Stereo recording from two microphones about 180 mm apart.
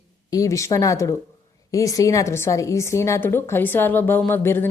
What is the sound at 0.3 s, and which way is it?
A woman's voice, 20° left (ahead or behind).